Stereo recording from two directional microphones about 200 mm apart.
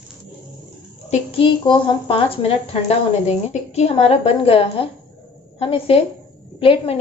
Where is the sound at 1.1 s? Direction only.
25° left (ahead or behind).